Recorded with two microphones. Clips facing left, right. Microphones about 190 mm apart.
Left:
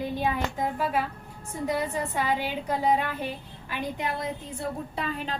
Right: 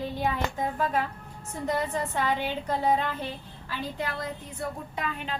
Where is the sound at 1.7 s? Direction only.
10° left (ahead or behind).